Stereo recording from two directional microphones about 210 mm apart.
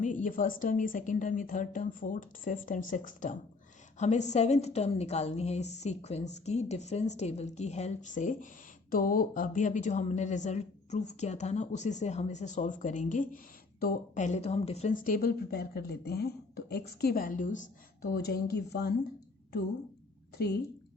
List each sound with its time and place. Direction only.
0.0 s a woman's voice: 40° left (ahead or behind)
18.1 s speech: 50° left (ahead or behind)